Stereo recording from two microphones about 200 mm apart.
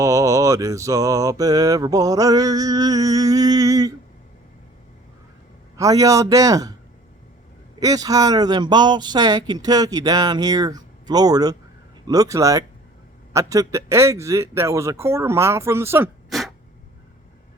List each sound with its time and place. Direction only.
0.0 s mantra: 15° right (ahead or behind)
5.7 s mantra: 15° right (ahead or behind)
7.8 s speech: 20° right (ahead or behind)
12.0 s mantra: 20° right (ahead or behind)